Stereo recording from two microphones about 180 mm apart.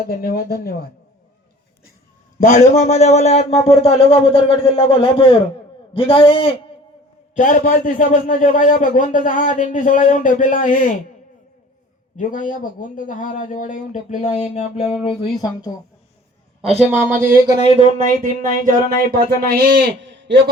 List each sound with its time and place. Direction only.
0.0 s speech: 60° left (ahead or behind)
2.4 s speech: 40° left (ahead or behind)
7.3 s speech: 45° left (ahead or behind)
12.1 s speech: 45° left (ahead or behind)
15.0 s speech: 25° left (ahead or behind)
16.6 s speech: 35° right (ahead or behind)
17.7 s speech: 30° left (ahead or behind)
17.9 s speech: 45° right (ahead or behind); by 20.4 s 75° right (ahead or behind)